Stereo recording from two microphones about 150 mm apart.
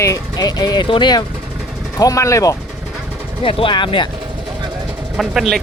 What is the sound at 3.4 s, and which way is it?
Speech, 35° left (ahead or behind).